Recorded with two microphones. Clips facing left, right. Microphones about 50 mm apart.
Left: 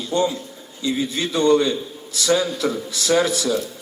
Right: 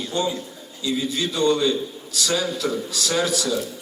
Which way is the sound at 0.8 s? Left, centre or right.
Left.